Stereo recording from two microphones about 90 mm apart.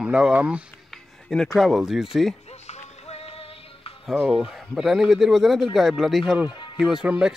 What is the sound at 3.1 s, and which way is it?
Music, 90° left.